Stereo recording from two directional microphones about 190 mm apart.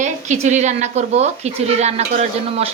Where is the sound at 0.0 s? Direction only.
40° right (ahead or behind).